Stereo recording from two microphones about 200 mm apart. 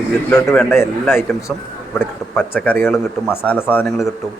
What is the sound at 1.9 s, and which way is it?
A man's voice, 10° left (ahead or behind).